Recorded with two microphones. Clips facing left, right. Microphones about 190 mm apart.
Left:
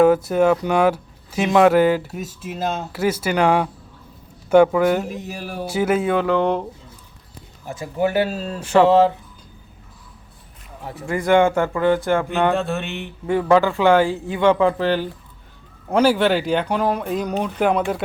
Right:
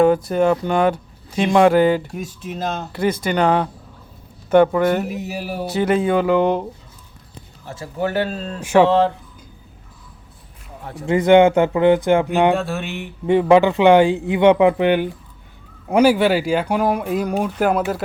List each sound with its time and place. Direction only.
0.0 s speech: 5° left (ahead or behind)
5.0 s speech: 10° right (ahead or behind)
5.6 s speech: 5° left (ahead or behind)
7.6 s speech: 15° left (ahead or behind)
8.6 s speech: 10° right (ahead or behind)
8.9 s speech: 5° left (ahead or behind)
11.0 s speech: 20° right (ahead or behind)
12.5 s speech: centre (ahead or behind)
13.2 s speech: 20° right (ahead or behind)